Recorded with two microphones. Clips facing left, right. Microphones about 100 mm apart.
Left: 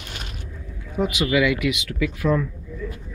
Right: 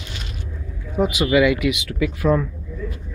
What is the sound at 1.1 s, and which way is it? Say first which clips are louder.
Speech: right 4 dB; 30° right (ahead or behind).